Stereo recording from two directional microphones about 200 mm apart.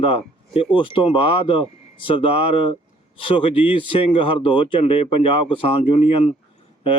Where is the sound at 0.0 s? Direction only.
30° left (ahead or behind).